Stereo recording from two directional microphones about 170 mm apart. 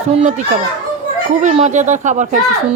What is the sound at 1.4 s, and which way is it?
Speech, 45° right (ahead or behind).